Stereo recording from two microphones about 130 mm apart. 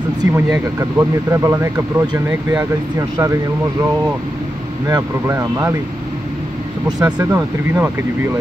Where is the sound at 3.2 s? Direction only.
25° right (ahead or behind).